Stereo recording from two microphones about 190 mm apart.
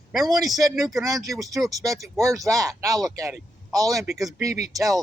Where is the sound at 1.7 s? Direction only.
15° right (ahead or behind).